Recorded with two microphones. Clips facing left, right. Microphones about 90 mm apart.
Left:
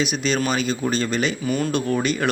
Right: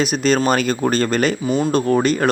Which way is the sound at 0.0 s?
45° right (ahead or behind).